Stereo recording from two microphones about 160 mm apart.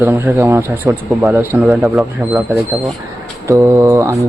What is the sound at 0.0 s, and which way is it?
Speech, 10° right (ahead or behind).